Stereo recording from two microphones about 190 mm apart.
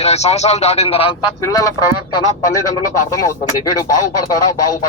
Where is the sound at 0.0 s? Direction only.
35° left (ahead or behind).